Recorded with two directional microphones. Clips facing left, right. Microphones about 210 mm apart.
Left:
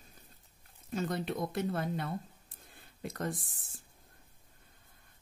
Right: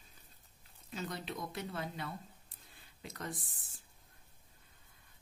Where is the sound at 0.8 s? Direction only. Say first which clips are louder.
Left 8 dB; 50° left (ahead or behind).